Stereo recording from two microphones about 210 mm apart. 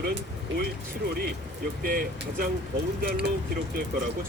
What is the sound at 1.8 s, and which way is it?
Speech, 45° right (ahead or behind).